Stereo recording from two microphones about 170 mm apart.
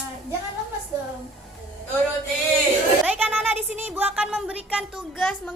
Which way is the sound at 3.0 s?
10° right (ahead or behind).